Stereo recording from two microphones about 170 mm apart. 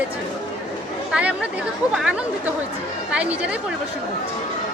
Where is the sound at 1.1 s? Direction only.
5° right (ahead or behind).